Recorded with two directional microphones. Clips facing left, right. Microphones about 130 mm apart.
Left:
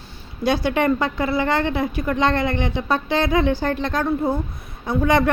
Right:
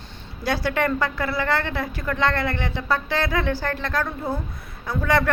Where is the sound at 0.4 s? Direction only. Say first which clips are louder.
Left 4 dB; 20° left (ahead or behind).